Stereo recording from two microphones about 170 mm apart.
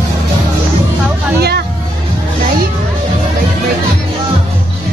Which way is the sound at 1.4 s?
70° right (ahead or behind).